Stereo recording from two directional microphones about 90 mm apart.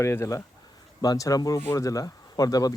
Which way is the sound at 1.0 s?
45° left (ahead or behind).